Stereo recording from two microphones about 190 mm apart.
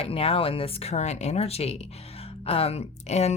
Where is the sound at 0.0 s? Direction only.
30° left (ahead or behind).